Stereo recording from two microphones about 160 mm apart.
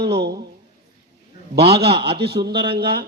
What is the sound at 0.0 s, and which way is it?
Speech, 90° right.